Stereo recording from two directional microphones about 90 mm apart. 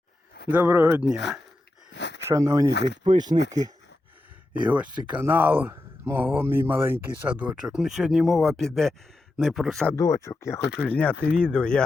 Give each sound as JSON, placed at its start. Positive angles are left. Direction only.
{"t": 0.5, "sound": "speech", "side_deg": -20}
{"t": 1.0, "sound": "speech", "side_deg": -5}
{"t": 2.2, "sound": "speech", "side_deg": -35}
{"t": 2.8, "sound": "speech", "side_deg": -55}
{"t": 4.6, "sound": "speech", "side_deg": -15}
{"t": 9.9, "sound": "speech", "side_deg": 40}
{"t": 10.8, "sound": "speech", "side_deg": 15}